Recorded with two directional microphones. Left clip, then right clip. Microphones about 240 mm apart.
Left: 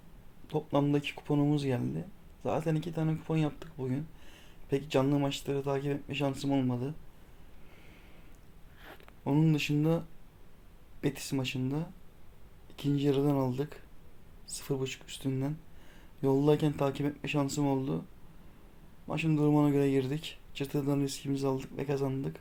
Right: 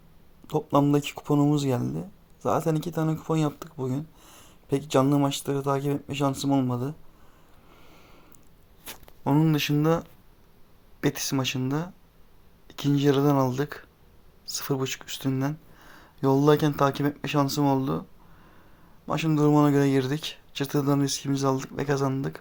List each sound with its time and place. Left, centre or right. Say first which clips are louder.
0.4 s speech: right 7 dB; right
9.0 s speech: right 6 dB; centre
11.0 s speech: right 7 dB; centre
19.0 s speech: right 6 dB; centre